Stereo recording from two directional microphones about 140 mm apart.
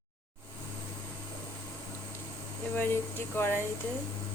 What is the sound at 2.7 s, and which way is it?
Air conditioning, 15° left (ahead or behind).